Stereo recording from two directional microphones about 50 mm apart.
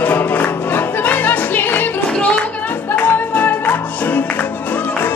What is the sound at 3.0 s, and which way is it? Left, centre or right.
Music, left.